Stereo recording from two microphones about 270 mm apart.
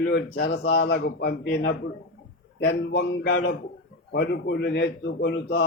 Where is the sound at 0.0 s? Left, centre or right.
Left.